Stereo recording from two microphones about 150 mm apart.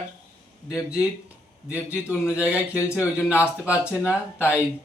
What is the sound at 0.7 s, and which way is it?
A man's voice, 5° right (ahead or behind).